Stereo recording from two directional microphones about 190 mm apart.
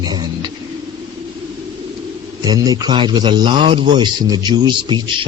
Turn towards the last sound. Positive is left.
turn(degrees=-20)  # may be behind; listen again after turning